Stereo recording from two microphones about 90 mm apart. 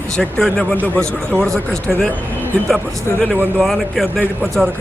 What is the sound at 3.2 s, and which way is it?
Speech, centre (ahead or behind).